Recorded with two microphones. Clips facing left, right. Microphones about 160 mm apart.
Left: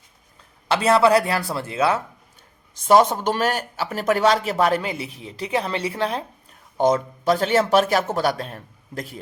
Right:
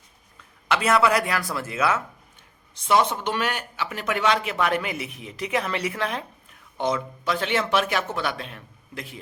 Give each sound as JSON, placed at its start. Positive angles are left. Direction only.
{"t": 0.3, "sound": "speech", "side_deg": 30}
{"t": 2.8, "sound": "speech", "side_deg": 45}